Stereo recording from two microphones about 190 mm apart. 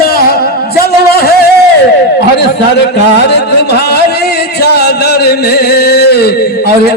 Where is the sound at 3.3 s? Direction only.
60° left (ahead or behind).